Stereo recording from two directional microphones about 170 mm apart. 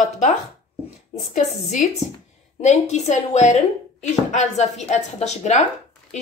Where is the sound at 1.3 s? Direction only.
45° left (ahead or behind).